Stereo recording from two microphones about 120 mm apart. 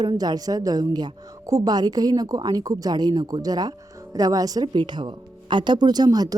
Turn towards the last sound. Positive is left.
turn(degrees=-35)  # may be behind; listen again after turning